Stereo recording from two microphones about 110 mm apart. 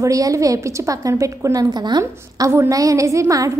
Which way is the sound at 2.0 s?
25° right (ahead or behind).